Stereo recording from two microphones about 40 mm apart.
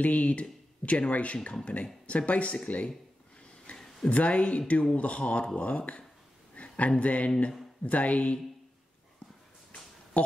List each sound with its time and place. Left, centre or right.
0.0 s speech: left
3.7 s a sound: left
4.1 s speech: left
10.1 s speech: left